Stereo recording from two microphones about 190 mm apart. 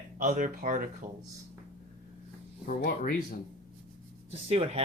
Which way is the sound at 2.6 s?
50° left (ahead or behind).